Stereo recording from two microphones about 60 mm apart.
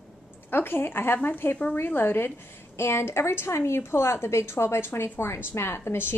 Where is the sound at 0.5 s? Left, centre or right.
Left.